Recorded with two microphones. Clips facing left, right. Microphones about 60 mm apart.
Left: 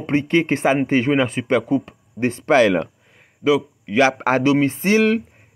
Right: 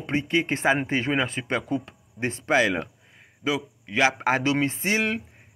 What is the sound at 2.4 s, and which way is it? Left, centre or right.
Speech, left.